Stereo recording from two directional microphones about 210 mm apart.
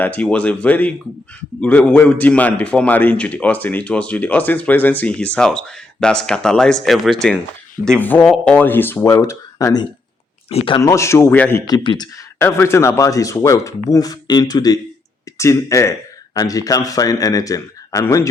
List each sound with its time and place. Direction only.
0.0 s a man's voice: 5° left (ahead or behind)
10.5 s speech: 30° left (ahead or behind)
10.8 s a man's voice: 15° left (ahead or behind)